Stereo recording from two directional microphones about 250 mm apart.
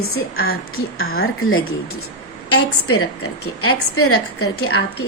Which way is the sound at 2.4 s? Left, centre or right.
Left.